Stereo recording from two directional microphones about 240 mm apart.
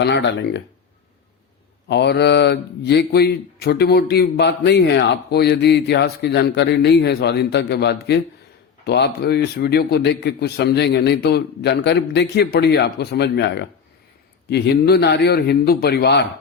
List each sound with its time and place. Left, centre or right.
0.0 s speech: left
1.9 s a man's voice: left